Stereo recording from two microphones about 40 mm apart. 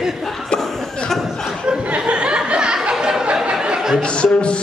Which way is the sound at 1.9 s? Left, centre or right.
Right.